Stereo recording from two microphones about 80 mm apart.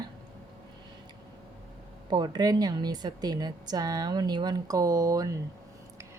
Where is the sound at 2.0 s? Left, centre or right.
Right.